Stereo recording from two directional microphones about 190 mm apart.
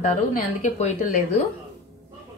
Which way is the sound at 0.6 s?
40° left (ahead or behind).